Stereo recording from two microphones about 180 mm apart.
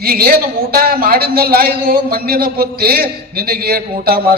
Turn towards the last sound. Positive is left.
turn(degrees=-55)  # may be behind; listen again after turning